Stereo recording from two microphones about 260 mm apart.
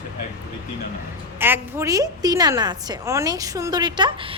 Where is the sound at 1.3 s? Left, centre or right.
Centre.